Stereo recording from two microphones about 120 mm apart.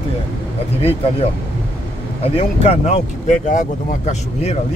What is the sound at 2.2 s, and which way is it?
Speech, 55° left (ahead or behind).